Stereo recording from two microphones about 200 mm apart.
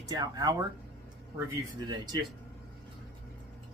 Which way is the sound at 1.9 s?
20° right (ahead or behind).